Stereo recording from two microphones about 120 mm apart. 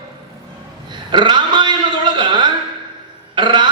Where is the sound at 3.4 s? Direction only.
40° right (ahead or behind).